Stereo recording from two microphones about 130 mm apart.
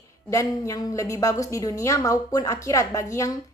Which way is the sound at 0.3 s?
25° left (ahead or behind).